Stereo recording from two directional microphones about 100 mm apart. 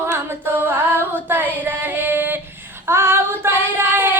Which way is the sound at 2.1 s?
20° right (ahead or behind).